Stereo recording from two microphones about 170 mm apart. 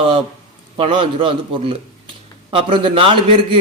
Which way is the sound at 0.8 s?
30° right (ahead or behind).